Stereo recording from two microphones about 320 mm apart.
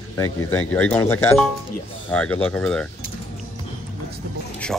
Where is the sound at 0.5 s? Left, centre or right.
Centre.